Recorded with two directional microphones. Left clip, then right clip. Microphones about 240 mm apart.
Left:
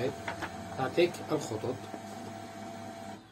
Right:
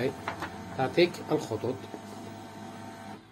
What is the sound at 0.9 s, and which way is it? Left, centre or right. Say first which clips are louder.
Speech: right 3 dB; centre.